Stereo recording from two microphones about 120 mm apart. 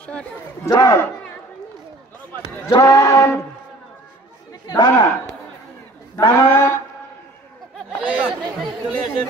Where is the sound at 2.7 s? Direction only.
30° left (ahead or behind).